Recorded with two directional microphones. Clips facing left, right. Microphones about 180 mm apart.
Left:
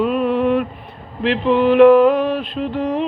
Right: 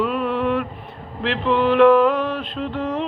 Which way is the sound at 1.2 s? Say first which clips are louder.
Left 4 dB; 15° left (ahead or behind).